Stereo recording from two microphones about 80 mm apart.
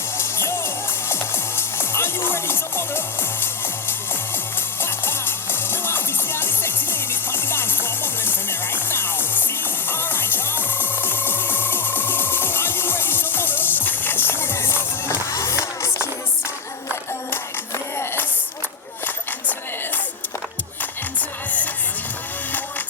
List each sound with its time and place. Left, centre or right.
0.2 s music: left
17.9 s a sound: left
21.2 s music: left